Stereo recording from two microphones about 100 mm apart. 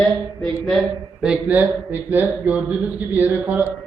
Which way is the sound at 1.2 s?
15° right (ahead or behind).